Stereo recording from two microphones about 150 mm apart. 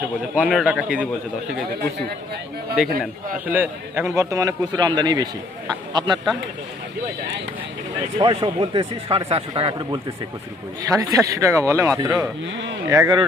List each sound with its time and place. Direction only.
0.3 s a man's voice: 5° right (ahead or behind)
2.8 s a man's voice: 5° right (ahead or behind); by 6.1 s 30° right (ahead or behind)
8.2 s speech: 35° right (ahead or behind)
11.1 s a man's voice: 20° right (ahead or behind)